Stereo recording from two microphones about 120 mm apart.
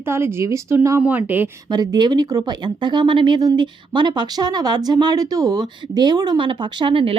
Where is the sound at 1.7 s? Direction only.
35° right (ahead or behind).